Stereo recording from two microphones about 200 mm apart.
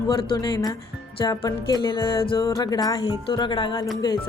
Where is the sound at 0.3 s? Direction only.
20° left (ahead or behind).